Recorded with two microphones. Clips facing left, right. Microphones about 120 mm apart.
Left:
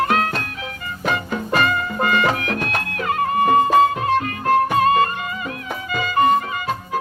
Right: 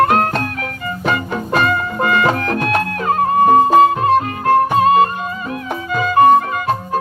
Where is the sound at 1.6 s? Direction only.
35° right (ahead or behind).